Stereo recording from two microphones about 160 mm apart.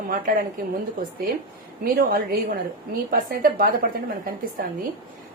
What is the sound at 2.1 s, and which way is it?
A woman's voice, 65° right (ahead or behind).